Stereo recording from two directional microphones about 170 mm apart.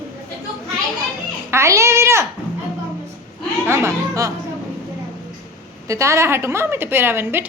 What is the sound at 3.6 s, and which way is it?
Speech, 15° right (ahead or behind).